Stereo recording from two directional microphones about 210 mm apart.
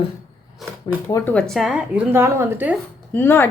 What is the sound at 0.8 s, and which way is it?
Speech, 15° left (ahead or behind).